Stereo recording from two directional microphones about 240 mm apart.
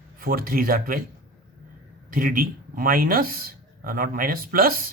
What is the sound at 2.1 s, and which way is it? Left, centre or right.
Speech, right.